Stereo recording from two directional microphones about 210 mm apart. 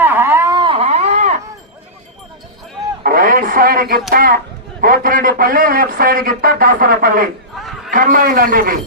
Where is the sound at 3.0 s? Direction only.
40° right (ahead or behind).